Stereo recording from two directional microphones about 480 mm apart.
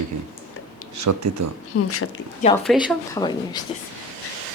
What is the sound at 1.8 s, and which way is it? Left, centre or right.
Speech, left.